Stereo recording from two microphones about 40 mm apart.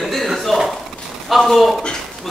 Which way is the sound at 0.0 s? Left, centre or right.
Centre.